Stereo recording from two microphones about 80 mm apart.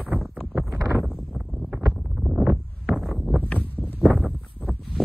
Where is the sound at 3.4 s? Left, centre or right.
Left.